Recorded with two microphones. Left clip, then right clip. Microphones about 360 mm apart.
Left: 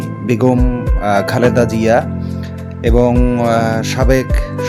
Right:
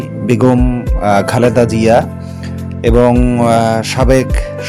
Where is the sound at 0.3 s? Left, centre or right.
Left.